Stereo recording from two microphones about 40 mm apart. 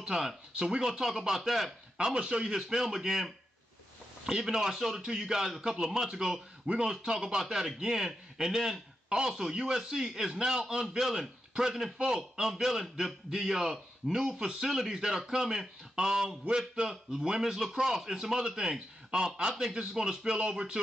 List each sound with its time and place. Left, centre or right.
0.0 s a man's voice: centre
2.0 s a man's voice: right
4.3 s speech: right
4.6 s a man's voice: centre
14.2 s a man's voice: right